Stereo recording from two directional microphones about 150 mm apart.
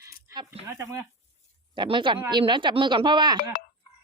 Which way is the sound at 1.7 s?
30° right (ahead or behind).